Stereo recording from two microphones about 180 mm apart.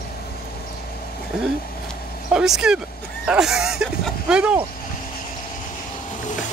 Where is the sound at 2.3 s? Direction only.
5° right (ahead or behind).